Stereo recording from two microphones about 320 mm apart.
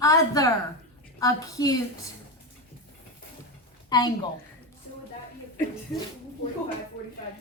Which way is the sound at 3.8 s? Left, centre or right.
Centre.